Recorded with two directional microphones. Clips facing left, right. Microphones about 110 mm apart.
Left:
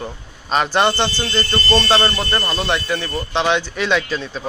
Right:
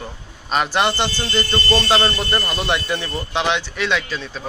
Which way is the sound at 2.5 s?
15° right (ahead or behind).